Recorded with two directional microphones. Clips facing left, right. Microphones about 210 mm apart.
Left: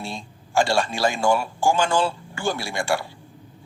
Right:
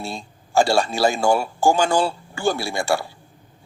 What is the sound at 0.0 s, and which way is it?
Speech, 40° right (ahead or behind).